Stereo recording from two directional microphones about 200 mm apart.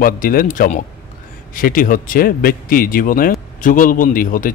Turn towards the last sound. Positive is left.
turn(degrees=45)  # may be behind; listen again after turning